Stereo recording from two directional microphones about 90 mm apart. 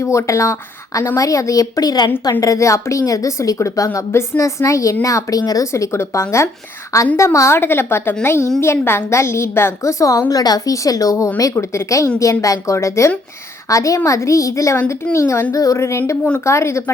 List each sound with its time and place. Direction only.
0.0 s a woman's voice: 35° left (ahead or behind)
2.4 s a woman's voice: 35° left (ahead or behind)